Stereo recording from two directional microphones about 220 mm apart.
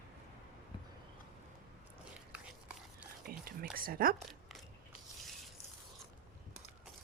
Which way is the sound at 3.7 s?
40° right (ahead or behind).